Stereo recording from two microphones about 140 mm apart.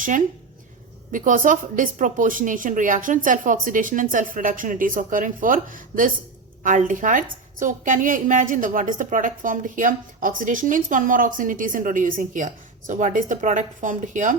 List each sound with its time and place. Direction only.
1.1 s a woman's voice: 70° right (ahead or behind)